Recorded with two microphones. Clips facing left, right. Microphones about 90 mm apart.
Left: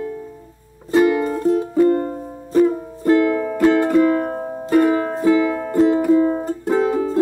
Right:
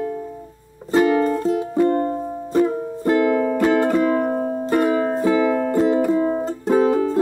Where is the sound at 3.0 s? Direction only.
15° right (ahead or behind).